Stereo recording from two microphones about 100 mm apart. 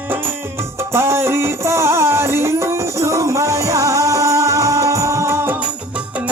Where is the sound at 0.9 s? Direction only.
25° right (ahead or behind).